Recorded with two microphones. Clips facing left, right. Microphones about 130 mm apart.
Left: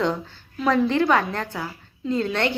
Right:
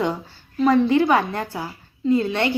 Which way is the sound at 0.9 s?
5° right (ahead or behind).